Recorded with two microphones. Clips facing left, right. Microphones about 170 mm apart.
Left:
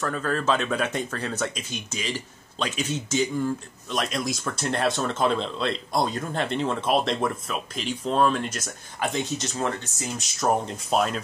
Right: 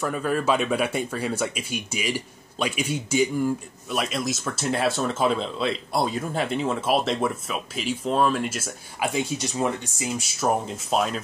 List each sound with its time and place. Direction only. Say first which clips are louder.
0.0 s speech: right 2 dB; 10° right (ahead or behind)